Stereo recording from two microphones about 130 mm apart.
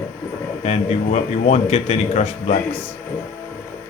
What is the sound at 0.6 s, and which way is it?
A man's voice, 55° left (ahead or behind).